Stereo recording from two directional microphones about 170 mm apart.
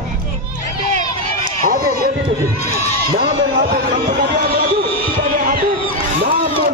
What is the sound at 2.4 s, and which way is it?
Speech, 40° left (ahead or behind).